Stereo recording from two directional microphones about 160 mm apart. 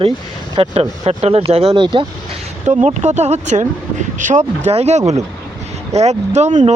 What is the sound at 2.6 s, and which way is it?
Speech, 45° right (ahead or behind).